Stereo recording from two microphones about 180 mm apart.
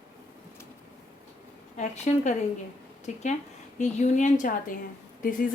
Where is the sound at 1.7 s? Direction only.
40° left (ahead or behind).